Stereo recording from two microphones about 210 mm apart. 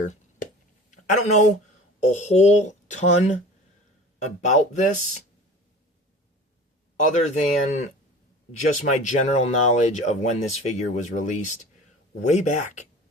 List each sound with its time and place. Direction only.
0.9 s a sound: 35° left (ahead or behind)
2.0 s speech: 35° left (ahead or behind)
7.1 s speech: 35° left (ahead or behind)